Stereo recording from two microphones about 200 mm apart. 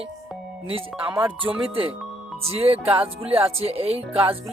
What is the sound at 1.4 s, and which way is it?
Speech, 25° right (ahead or behind).